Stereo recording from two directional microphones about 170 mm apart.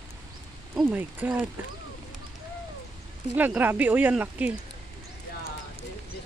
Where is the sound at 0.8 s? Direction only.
10° right (ahead or behind).